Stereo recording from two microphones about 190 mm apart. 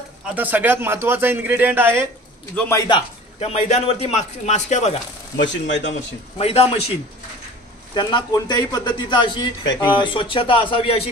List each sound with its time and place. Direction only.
0.3 s a man's voice: 10° right (ahead or behind)
2.7 s a man's voice: 20° left (ahead or behind)
3.3 s a man's voice: 35° left (ahead or behind)
5.4 s speech: 70° left (ahead or behind)
6.3 s a man's voice: 30° left (ahead or behind)
7.9 s a man's voice: 25° left (ahead or behind)